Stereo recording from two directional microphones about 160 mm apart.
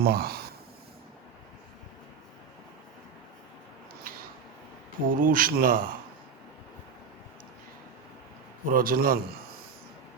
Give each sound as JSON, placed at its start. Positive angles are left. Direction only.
{"t": 0.0, "sound": "speech", "side_deg": -75}
{"t": 5.0, "sound": "speech", "side_deg": -60}
{"t": 8.7, "sound": "speech", "side_deg": -65}